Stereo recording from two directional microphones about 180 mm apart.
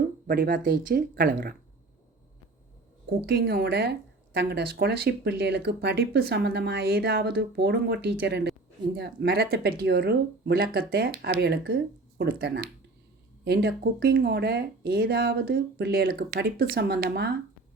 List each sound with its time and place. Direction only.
0.3 s speech: 50° right (ahead or behind)
3.2 s speech: 65° right (ahead or behind)